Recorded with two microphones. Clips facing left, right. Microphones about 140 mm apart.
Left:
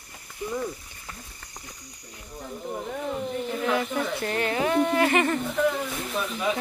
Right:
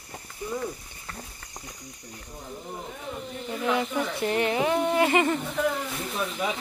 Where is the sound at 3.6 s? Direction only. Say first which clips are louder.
Right 1 dB; 20° right (ahead or behind).